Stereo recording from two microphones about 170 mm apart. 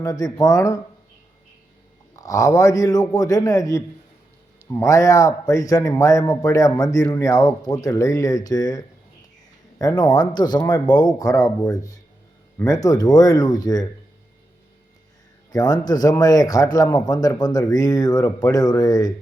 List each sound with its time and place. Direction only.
0.0 s speech: 20° left (ahead or behind)
2.1 s speech: 20° left (ahead or behind)
15.5 s speech: 20° left (ahead or behind)